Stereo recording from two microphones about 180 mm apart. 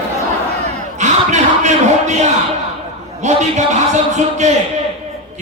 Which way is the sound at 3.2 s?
40° right (ahead or behind).